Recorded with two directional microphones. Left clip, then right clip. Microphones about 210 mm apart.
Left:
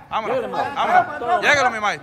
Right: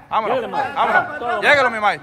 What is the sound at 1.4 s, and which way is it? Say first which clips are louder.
Speech: right 3 dB; 10° left (ahead or behind).